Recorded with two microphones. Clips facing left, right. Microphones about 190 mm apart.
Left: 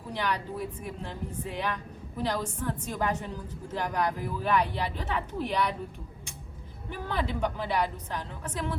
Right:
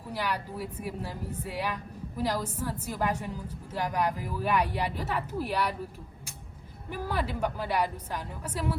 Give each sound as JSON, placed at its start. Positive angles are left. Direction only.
{"t": 0.1, "sound": "speech", "side_deg": -10}
{"t": 6.9, "sound": "speech", "side_deg": -10}